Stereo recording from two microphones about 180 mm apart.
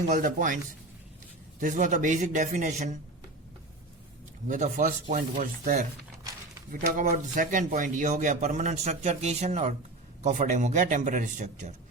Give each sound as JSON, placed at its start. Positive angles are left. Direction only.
{"t": 0.1, "sound": "a man's voice", "side_deg": -45}
{"t": 4.4, "sound": "a man's voice", "side_deg": -45}